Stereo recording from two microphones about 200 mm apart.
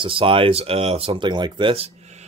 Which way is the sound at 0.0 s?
25° right (ahead or behind).